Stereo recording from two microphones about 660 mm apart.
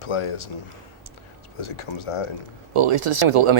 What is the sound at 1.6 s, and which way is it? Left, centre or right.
Speech, left.